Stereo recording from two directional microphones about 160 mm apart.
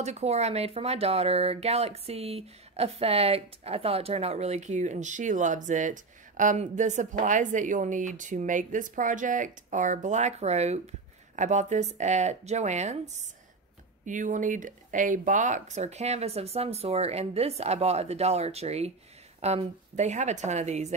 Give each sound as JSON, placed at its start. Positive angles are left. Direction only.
{"t": 0.0, "sound": "speech", "side_deg": -45}